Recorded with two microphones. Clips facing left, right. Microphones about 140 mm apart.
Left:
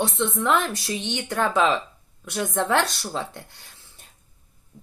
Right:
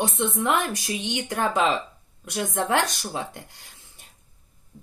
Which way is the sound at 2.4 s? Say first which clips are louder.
Left 1 dB; 15° right (ahead or behind).